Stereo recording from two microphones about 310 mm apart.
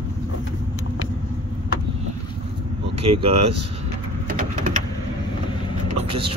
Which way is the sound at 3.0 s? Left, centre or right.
Centre.